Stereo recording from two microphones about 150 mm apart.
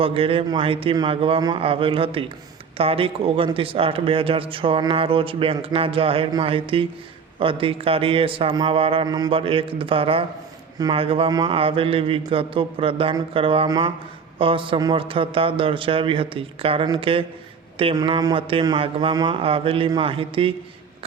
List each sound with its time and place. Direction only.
0.0 s a man's voice: 40° right (ahead or behind)
9.0 s mantra: 25° right (ahead or behind)
9.3 s a man's voice: 35° right (ahead or behind)
11.3 s mantra: 25° right (ahead or behind)
11.5 s a man's voice: 40° right (ahead or behind)